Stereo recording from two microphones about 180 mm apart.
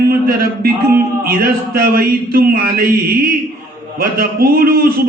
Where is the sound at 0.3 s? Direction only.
60° right (ahead or behind).